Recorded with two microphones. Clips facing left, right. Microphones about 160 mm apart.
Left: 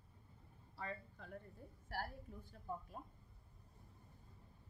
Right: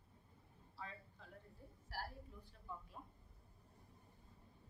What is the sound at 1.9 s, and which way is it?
Speech, 55° left (ahead or behind).